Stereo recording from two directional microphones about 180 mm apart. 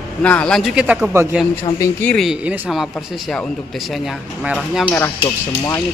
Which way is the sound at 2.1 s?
Centre (ahead or behind).